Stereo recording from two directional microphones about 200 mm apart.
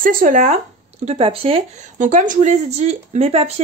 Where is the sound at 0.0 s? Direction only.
45° right (ahead or behind).